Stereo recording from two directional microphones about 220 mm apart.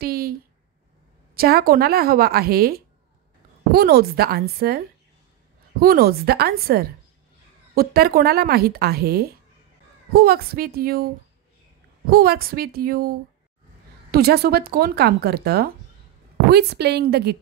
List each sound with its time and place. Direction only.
0.0 s speech: 45° right (ahead or behind)
12.1 s speech: 45° right (ahead or behind)